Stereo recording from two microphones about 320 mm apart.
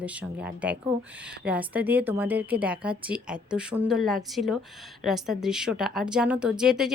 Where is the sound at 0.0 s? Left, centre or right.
Centre.